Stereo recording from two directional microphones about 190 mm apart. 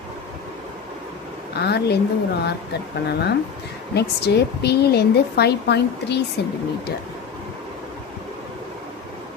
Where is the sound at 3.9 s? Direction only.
60° left (ahead or behind).